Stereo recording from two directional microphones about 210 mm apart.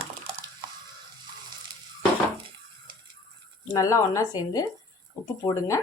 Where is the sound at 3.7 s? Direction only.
15° left (ahead or behind).